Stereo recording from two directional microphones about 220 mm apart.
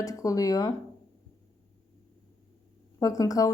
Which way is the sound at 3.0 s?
15° left (ahead or behind).